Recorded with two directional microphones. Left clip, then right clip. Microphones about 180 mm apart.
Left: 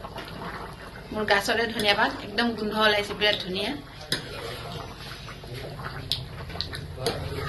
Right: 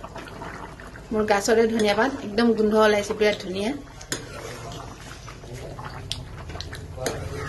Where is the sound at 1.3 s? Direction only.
70° right (ahead or behind).